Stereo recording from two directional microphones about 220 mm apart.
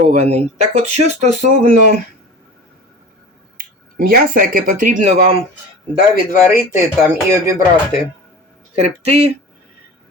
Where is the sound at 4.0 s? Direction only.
40° right (ahead or behind).